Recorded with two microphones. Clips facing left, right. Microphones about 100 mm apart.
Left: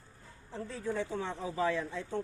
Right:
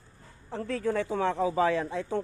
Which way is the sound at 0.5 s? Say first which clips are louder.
Right 7 dB; 80° right.